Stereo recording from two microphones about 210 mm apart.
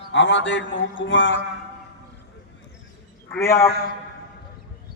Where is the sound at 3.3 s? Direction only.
10° left (ahead or behind).